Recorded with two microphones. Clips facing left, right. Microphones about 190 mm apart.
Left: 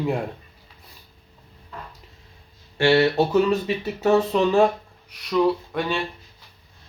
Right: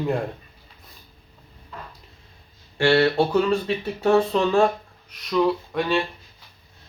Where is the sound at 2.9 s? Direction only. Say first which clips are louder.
Even; 20° left (ahead or behind).